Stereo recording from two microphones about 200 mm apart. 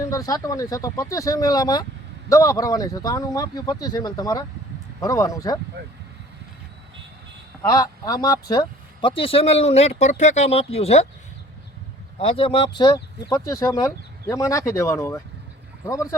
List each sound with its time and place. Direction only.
0.0 s speech: 15° left (ahead or behind)
7.6 s speech: 15° left (ahead or behind)
12.2 s speech: 25° left (ahead or behind)